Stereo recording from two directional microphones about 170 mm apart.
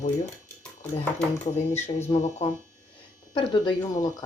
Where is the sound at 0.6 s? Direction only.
5° left (ahead or behind).